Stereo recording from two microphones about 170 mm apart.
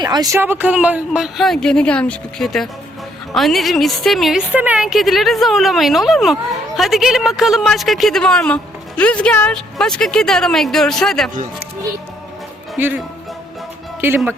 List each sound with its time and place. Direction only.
0.0 s speech: 25° right (ahead or behind)
0.3 s a woman's voice: 10° right (ahead or behind)
12.8 s speech: 10° right (ahead or behind)
14.0 s speech: 10° right (ahead or behind)